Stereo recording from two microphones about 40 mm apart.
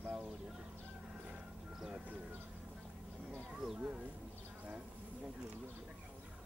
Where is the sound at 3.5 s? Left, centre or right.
Centre.